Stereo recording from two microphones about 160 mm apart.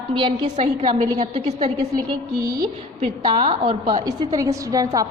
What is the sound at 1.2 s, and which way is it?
Speech, 40° right (ahead or behind).